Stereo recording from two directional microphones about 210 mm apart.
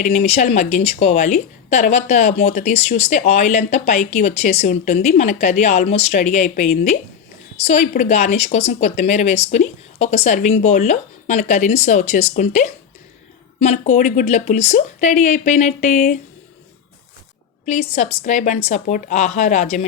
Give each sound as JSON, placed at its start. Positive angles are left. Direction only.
{"t": 0.0, "sound": "speech", "side_deg": 35}
{"t": 17.7, "sound": "speech", "side_deg": 35}